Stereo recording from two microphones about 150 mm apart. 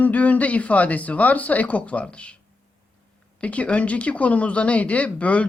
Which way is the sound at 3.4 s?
10° left (ahead or behind).